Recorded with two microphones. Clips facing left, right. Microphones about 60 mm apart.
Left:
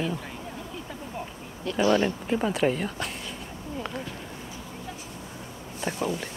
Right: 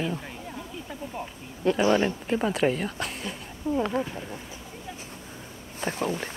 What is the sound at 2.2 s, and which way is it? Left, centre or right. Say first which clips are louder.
Speech: even; centre.